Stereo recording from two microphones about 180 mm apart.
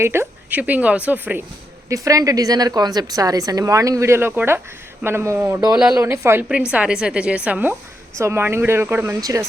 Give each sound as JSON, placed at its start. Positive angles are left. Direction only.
{"t": 0.0, "sound": "a woman's voice", "side_deg": -15}